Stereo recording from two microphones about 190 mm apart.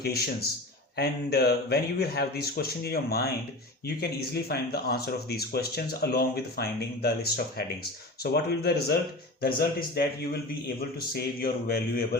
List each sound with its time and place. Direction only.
0.9 s a man's voice: 55° left (ahead or behind)